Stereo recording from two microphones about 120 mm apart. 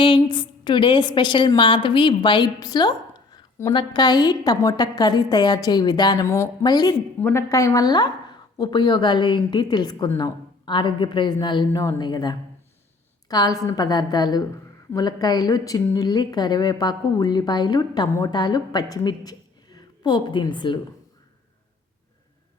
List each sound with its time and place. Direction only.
0.0 s a woman's voice: 40° left (ahead or behind)
6.2 s speech: 20° left (ahead or behind)
6.6 s speech: 35° left (ahead or behind)
7.2 s a woman's voice: 15° left (ahead or behind)
7.5 s a woman's voice: 30° left (ahead or behind)